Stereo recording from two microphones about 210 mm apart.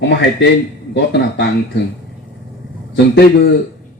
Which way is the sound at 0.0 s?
55° left (ahead or behind).